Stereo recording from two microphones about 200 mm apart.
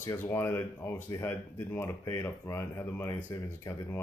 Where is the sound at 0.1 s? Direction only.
10° left (ahead or behind).